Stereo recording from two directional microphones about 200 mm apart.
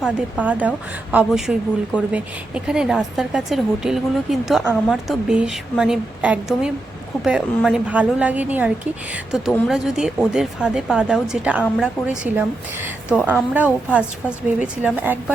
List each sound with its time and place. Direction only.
0.0 s a woman's voice: 5° right (ahead or behind)
11.6 s a woman's voice: 5° left (ahead or behind)
12.0 s a woman's voice: 5° right (ahead or behind)